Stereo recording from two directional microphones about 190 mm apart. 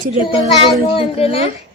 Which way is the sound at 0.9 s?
30° left (ahead or behind).